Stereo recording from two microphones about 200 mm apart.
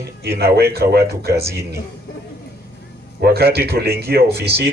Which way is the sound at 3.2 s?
50° right (ahead or behind).